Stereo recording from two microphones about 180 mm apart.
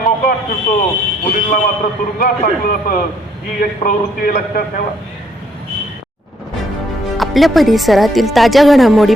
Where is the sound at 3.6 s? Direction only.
55° left (ahead or behind).